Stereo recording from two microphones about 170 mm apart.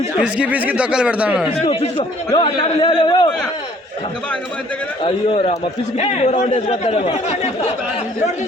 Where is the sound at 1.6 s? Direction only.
30° left (ahead or behind).